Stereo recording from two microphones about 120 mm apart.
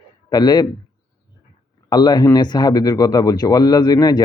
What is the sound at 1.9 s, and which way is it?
Speech, 35° left (ahead or behind).